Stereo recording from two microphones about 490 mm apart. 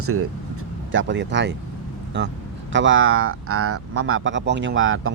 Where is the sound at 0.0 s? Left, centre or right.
Right.